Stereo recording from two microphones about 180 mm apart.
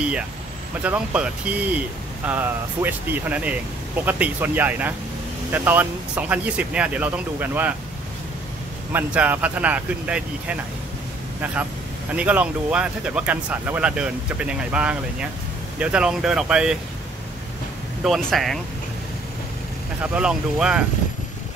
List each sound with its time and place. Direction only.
0.8 s speech: 5° right (ahead or behind)
8.9 s speech: 10° right (ahead or behind)
18.0 s speech: centre (ahead or behind)
20.0 s speech: 5° right (ahead or behind)